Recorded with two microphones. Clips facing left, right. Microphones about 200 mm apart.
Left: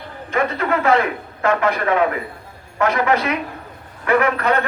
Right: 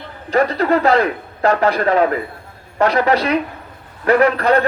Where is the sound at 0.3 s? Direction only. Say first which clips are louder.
Right 5 dB; 35° right (ahead or behind).